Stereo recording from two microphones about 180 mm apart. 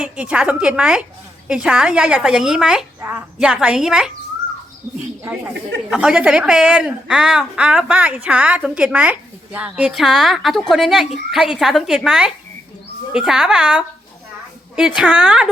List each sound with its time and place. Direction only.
0.0 s a woman's voice: 5° right (ahead or behind)
5.2 s a woman's voice: 10° right (ahead or behind)